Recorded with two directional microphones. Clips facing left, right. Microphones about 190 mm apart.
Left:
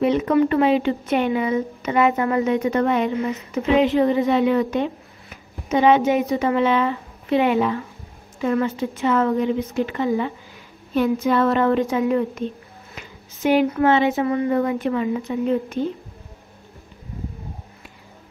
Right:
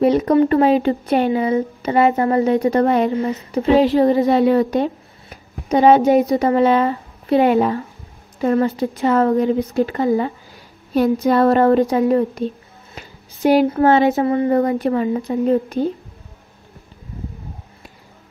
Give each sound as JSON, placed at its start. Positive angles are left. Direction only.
{"t": 0.0, "sound": "speech", "side_deg": -40}